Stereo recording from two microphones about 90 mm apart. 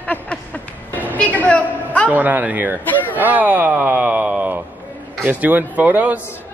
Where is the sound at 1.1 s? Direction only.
15° left (ahead or behind).